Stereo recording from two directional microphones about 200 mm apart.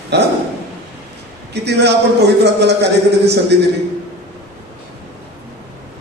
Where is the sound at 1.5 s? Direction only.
55° right (ahead or behind).